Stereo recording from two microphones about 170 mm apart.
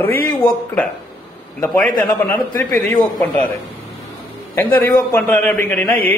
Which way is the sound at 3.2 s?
10° left (ahead or behind).